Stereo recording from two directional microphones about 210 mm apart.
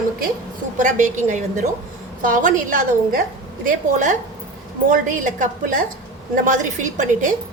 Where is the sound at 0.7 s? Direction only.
35° right (ahead or behind).